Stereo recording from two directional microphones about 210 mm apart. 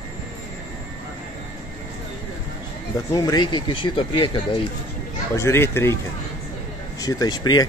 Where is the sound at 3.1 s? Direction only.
15° left (ahead or behind).